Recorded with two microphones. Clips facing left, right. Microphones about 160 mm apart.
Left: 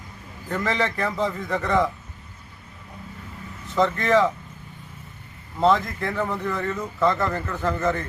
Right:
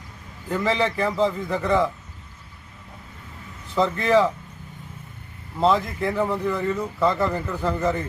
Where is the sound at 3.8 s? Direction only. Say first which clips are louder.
Even; 5° right (ahead or behind).